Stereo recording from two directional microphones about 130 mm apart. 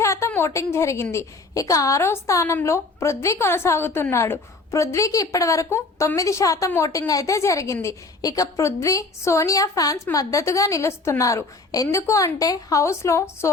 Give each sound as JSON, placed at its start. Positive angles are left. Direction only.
{"t": 0.0, "sound": "a woman's voice", "side_deg": 20}